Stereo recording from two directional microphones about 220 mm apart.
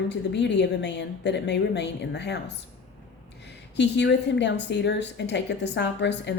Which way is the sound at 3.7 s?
55° left (ahead or behind).